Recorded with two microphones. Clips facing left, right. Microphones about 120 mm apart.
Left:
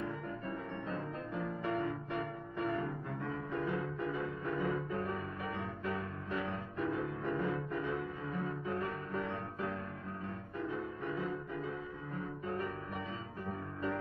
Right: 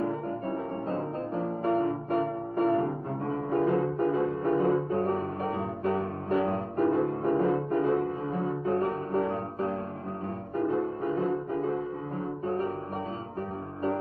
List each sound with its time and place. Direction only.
0.0 s music: 40° right (ahead or behind)
8.3 s music: 30° right (ahead or behind)
8.7 s music: 40° right (ahead or behind)